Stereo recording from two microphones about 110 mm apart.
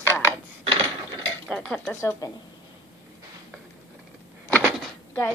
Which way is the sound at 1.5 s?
5° left (ahead or behind).